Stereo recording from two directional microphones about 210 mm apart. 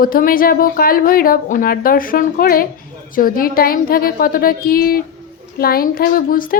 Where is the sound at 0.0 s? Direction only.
45° left (ahead or behind).